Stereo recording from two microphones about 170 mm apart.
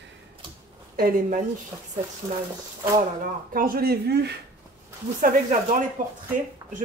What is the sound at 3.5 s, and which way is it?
Speech, 60° right (ahead or behind).